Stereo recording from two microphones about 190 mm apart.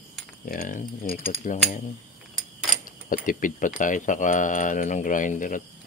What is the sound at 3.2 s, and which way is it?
Speech, 45° left (ahead or behind).